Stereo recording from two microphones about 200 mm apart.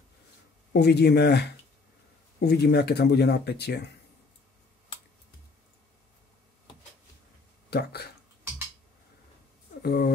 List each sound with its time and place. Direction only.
0.7 s speech: 55° left (ahead or behind)
7.7 s speech: 55° left (ahead or behind)
9.8 s speech: 50° left (ahead or behind)